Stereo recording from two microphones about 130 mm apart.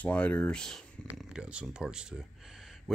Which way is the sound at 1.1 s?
5° right (ahead or behind).